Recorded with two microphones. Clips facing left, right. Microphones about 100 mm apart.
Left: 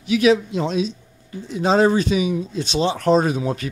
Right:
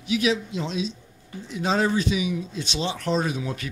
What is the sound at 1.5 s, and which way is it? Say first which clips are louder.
Speech: left 7 dB; 35° left (ahead or behind).